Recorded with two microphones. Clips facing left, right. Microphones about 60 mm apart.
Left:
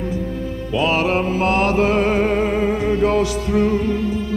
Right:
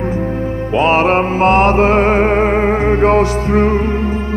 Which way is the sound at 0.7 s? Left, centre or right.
Right.